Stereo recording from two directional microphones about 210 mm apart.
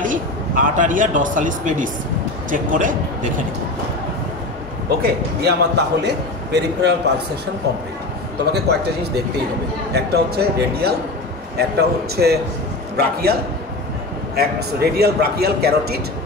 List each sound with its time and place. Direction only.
0.0 s speech: 40° right (ahead or behind)
5.0 s a man's voice: 50° right (ahead or behind)
8.5 s a man's voice: 50° right (ahead or behind)